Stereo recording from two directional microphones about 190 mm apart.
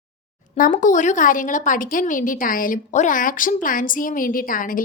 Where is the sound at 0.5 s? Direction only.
45° left (ahead or behind).